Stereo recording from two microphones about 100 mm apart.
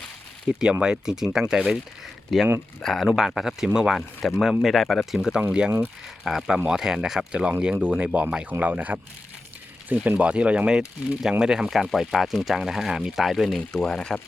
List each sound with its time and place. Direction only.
0.4 s speech: 10° right (ahead or behind); by 14.2 s 5° left (ahead or behind)